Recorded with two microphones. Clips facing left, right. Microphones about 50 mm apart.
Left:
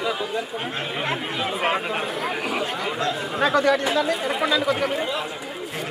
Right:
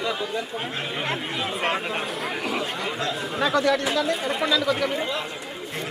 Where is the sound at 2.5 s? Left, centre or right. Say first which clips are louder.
Left 2 dB; centre.